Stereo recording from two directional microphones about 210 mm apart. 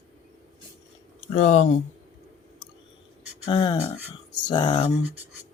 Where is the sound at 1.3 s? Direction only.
35° left (ahead or behind).